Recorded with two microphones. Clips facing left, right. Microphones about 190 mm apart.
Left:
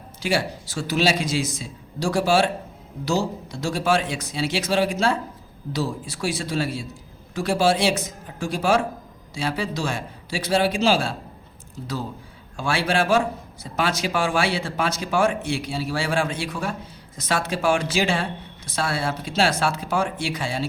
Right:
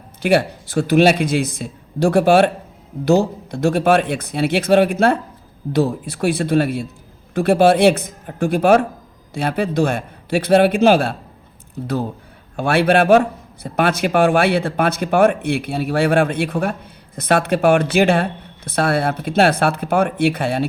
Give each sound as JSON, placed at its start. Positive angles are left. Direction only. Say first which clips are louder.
{"t": 0.2, "sound": "a man's voice", "louder": "right 8 dB", "side_deg": -60}